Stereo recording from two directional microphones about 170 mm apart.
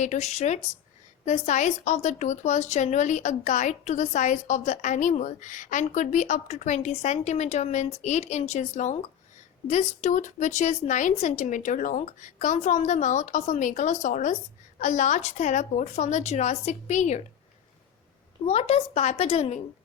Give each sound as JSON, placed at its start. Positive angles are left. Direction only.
{"t": 0.0, "sound": "speech", "side_deg": 45}
{"t": 18.4, "sound": "speech", "side_deg": 35}